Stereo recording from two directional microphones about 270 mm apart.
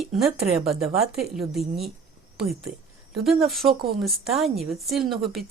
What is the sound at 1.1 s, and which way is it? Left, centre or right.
Speech, centre.